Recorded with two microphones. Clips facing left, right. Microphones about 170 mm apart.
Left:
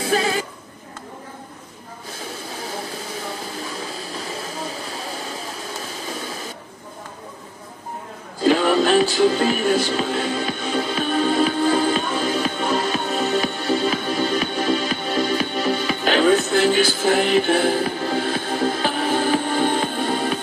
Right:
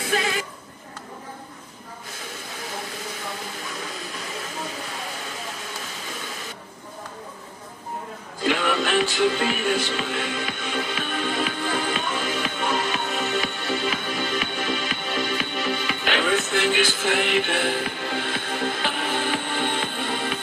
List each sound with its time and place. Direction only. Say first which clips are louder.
0.0 s a capella: left 5 dB; 35° left (ahead or behind)
2.5 s a sound: left 3 dB; 35° left (ahead or behind)
8.4 s music: left 7 dB; 35° left (ahead or behind)